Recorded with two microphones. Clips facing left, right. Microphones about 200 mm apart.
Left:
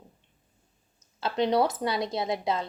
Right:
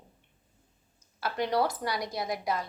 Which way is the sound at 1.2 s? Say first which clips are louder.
Left 4 dB; 25° left (ahead or behind).